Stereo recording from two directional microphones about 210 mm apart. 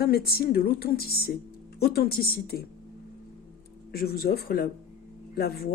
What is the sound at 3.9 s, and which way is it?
A woman's voice, 45° left (ahead or behind).